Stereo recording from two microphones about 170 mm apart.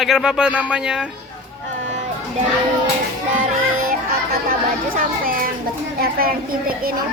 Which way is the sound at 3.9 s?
55° right (ahead or behind).